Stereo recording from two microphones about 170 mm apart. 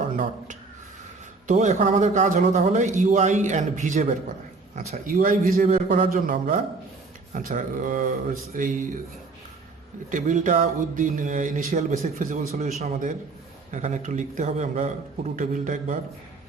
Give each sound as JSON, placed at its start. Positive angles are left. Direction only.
{"t": 1.5, "sound": "a man's voice", "side_deg": -45}
{"t": 10.1, "sound": "a man's voice", "side_deg": -50}